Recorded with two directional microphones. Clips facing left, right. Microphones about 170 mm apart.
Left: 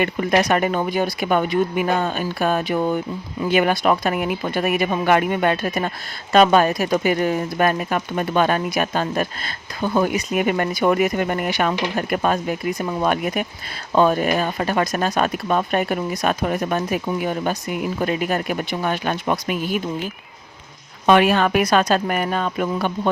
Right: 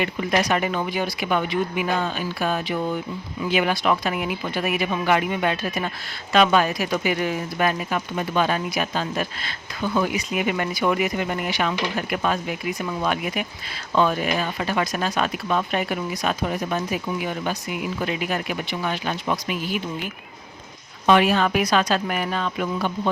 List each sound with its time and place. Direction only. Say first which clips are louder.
0.0 s speech: left 4 dB; 50° left (ahead or behind)
21.1 s speech: left 3 dB; 55° left (ahead or behind)